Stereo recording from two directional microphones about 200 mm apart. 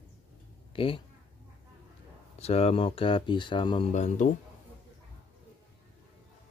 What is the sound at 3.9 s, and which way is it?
Speech, 35° left (ahead or behind).